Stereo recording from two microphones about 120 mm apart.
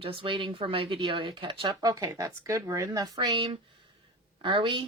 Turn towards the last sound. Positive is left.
turn(degrees=-45)  # may be behind; listen again after turning